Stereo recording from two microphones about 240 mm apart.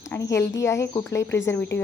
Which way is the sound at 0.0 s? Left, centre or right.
Centre.